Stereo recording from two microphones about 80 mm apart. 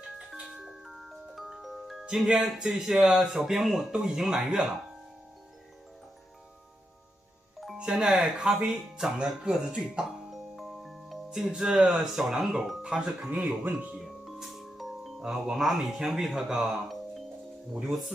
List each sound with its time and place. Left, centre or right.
0.0 s music: centre
7.7 s speech: centre
13.3 s speech: centre
13.9 s speech: centre